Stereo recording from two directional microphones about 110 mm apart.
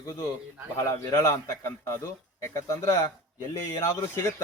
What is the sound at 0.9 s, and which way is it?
A man's voice, 25° left (ahead or behind).